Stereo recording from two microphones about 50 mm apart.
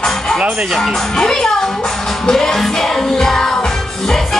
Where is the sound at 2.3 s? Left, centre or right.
Centre.